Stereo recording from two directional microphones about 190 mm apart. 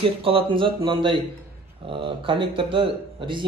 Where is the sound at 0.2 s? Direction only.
30° right (ahead or behind).